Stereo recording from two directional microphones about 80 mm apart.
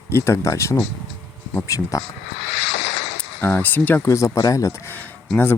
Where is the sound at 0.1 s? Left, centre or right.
Left.